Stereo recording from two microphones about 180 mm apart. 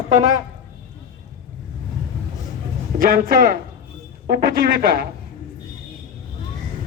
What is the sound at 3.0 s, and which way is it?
Speech, 55° right (ahead or behind).